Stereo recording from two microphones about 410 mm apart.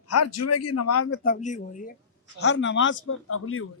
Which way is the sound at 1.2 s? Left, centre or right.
Centre.